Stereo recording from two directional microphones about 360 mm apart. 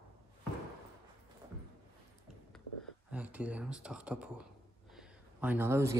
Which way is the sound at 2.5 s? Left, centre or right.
Centre.